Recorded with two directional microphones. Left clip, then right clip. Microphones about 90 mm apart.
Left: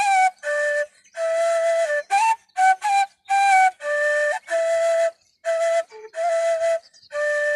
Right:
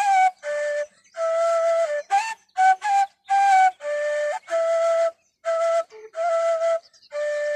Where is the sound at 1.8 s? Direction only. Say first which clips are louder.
Left 2 dB; 50° left (ahead or behind).